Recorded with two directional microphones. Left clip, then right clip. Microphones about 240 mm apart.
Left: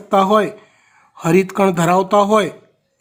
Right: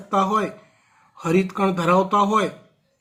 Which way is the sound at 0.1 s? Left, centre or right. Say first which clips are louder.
Left 7 dB; left.